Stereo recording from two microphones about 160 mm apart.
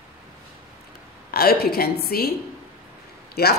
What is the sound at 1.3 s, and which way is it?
A woman's voice, 75° left (ahead or behind).